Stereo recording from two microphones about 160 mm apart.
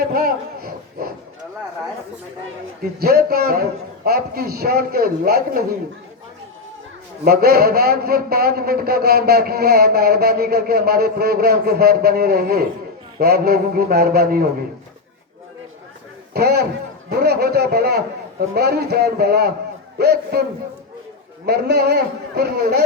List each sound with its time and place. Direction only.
0.0 s speech: 70° right (ahead or behind)
3.0 s a man's voice: 75° right (ahead or behind)
7.3 s a man's voice: 75° right (ahead or behind)
16.3 s a man's voice: 90° right
21.4 s a man's voice: 90° right